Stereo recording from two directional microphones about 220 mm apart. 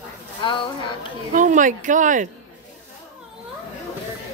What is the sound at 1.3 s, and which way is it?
Speech, 35° right (ahead or behind).